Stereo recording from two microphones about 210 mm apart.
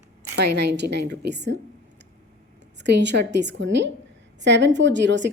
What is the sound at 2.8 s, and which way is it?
A woman's voice, 55° right (ahead or behind).